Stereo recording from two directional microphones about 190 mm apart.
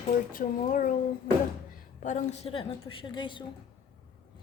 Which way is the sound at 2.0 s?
40° left (ahead or behind).